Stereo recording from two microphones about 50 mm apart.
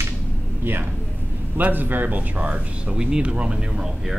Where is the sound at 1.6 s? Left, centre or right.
Right; by 4.2 s centre.